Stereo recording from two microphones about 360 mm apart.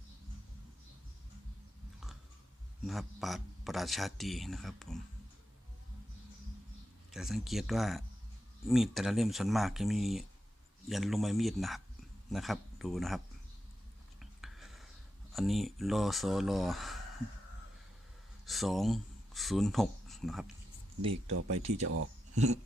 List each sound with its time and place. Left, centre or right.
2.8 s speech: centre
7.1 s speech: centre
14.2 s whispering: centre
15.3 s speech: centre
18.4 s speech: centre
21.2 s speech: right